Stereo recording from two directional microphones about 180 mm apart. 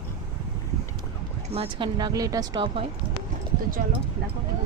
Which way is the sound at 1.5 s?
30° right (ahead or behind).